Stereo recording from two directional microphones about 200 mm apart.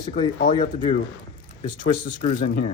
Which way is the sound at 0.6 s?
40° left (ahead or behind).